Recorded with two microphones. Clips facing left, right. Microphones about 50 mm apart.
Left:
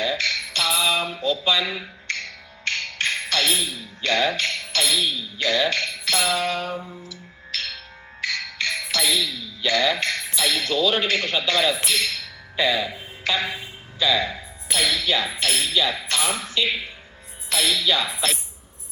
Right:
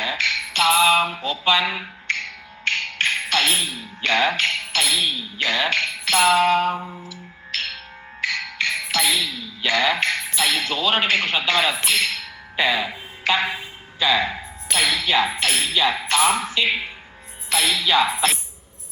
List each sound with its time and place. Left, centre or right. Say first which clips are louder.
0.0 s music: right 1 dB; right
2.0 s music: right 5 dB; right
4.0 s speech: right 2 dB; right
5.4 s a sound: right 1 dB; right
8.2 s music: right 3 dB; right
9.6 s speech: right 2 dB; right
11.9 s music: right 3 dB; right
17.5 s speech: right 2 dB; right